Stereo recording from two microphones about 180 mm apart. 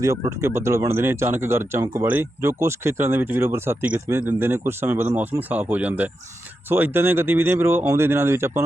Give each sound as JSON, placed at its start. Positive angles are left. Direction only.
{"t": 0.0, "sound": "speech", "side_deg": -15}